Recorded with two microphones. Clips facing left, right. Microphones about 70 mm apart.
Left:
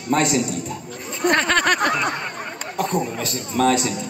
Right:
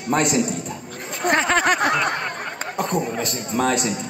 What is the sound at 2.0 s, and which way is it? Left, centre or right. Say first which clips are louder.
Snicker: right 1 dB; right.